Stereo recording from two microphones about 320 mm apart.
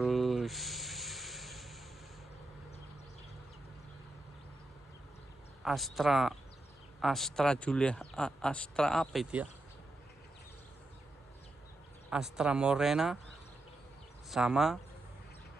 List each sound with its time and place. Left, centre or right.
0.0 s a sound: centre
5.6 s a man's voice: centre
12.1 s a man's voice: centre
14.3 s a man's voice: centre